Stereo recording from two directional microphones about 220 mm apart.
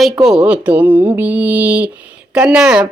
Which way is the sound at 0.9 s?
10° right (ahead or behind).